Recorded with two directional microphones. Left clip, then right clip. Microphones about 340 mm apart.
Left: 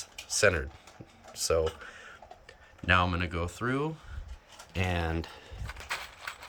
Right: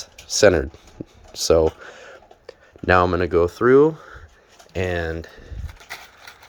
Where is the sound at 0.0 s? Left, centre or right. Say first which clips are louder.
Right 10 dB; centre.